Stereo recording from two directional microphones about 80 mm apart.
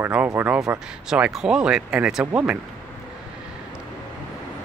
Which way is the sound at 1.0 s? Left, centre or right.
Centre.